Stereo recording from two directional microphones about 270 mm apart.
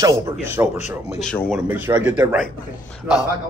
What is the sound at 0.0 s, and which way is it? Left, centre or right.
Speech, centre.